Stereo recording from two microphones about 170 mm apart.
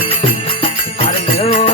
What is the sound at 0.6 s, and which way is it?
Jingle bell, 35° left (ahead or behind).